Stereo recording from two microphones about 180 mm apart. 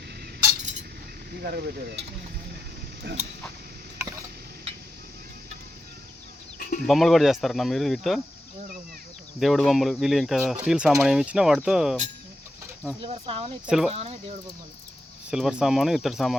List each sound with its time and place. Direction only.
1.4 s speech: 60° right (ahead or behind)
3.1 s a sound: 70° right (ahead or behind)
3.9 s a sound: 15° right (ahead or behind)
6.8 s speech: centre (ahead or behind)
9.4 s speech: centre (ahead or behind)
13.0 s speech: 30° right (ahead or behind)
13.7 s speech: 5° right (ahead or behind)
13.9 s speech: 35° right (ahead or behind)
15.3 s speech: 5° right (ahead or behind)